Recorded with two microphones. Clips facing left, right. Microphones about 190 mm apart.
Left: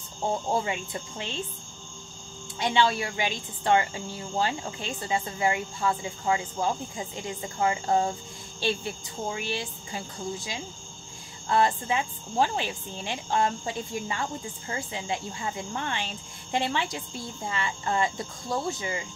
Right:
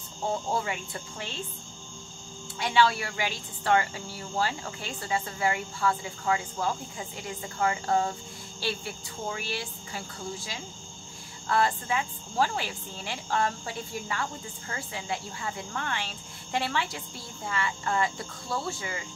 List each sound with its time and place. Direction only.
0.3 s speech: 20° left (ahead or behind)
2.6 s speech: 20° left (ahead or behind)